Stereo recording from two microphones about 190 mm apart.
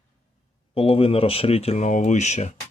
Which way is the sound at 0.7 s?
30° left (ahead or behind).